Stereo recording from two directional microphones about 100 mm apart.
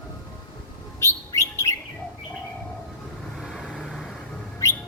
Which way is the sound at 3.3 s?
5° right (ahead or behind).